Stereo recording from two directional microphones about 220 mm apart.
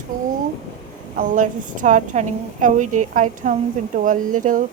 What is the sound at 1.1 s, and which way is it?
A woman's voice, 40° right (ahead or behind).